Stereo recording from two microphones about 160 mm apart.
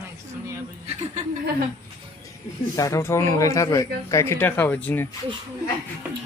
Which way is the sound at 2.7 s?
20° left (ahead or behind).